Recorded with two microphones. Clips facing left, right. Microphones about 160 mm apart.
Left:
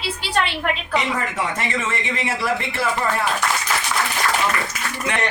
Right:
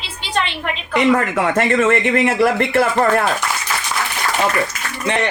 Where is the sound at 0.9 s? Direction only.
60° right (ahead or behind).